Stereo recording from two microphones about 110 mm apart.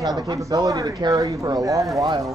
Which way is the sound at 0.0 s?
35° right (ahead or behind).